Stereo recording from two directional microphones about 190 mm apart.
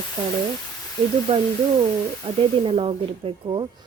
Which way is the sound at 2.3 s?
25° right (ahead or behind).